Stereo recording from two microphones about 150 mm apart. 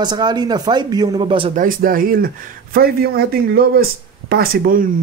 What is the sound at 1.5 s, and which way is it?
Speech, 65° right (ahead or behind).